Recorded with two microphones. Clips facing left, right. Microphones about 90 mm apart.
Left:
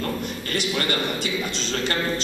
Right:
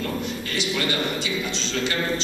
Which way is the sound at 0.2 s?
50° left (ahead or behind).